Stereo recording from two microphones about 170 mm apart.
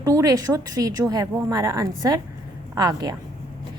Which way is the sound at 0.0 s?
20° right (ahead or behind).